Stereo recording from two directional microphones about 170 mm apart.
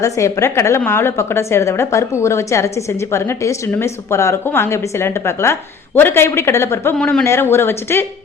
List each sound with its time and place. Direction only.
0.0 s a woman's voice: 15° left (ahead or behind)